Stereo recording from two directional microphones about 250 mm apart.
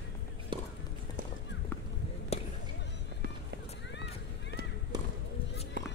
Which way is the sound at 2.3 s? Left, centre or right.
Left.